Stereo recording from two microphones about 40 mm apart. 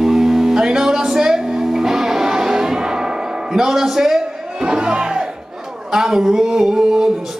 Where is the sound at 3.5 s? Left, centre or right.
Centre.